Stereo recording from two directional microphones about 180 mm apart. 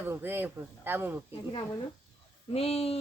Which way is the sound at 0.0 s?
10° right (ahead or behind).